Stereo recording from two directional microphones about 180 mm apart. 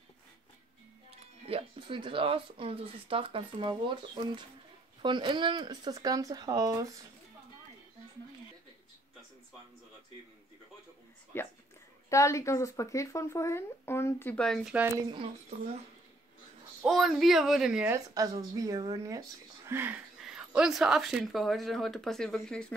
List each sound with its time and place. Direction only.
1.4 s speech: 30° right (ahead or behind)
5.0 s speech: 25° right (ahead or behind)
11.3 s speech: 10° left (ahead or behind); by 14.9 s 5° right (ahead or behind)
15.0 s speech: 30° right (ahead or behind)
16.8 s speech: centre (ahead or behind)
17.9 s speech: 20° right (ahead or behind); by 22.8 s 5° left (ahead or behind)